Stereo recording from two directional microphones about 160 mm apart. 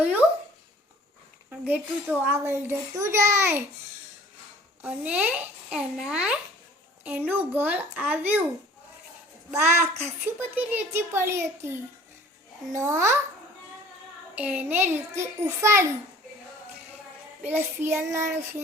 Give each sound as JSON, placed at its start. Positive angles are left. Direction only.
{"t": 1.5, "sound": "a child's voice", "side_deg": -10}
{"t": 4.8, "sound": "a child's voice", "side_deg": -10}
{"t": 9.5, "sound": "a child's voice", "side_deg": -15}
{"t": 12.7, "sound": "a child's voice", "side_deg": -15}
{"t": 14.3, "sound": "a child's voice", "side_deg": -10}
{"t": 17.4, "sound": "a child's voice", "side_deg": -15}